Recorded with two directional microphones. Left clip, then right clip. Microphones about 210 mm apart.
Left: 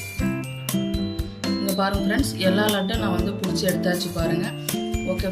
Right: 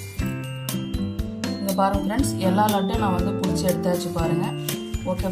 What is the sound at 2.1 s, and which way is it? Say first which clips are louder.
Music: left 2 dB; 35° right (ahead or behind).